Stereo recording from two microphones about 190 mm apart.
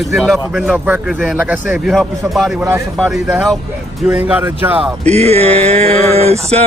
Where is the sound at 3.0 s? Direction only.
Centre (ahead or behind).